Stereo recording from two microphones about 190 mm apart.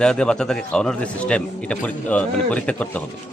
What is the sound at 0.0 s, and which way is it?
A man's voice, 5° left (ahead or behind).